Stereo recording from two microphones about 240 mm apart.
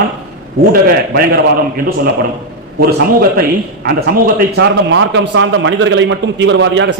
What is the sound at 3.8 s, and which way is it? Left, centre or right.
A man's voice, right.